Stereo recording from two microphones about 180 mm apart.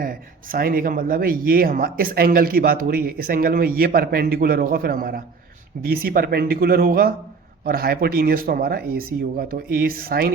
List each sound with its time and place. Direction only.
0.0 s speech: 50° right (ahead or behind)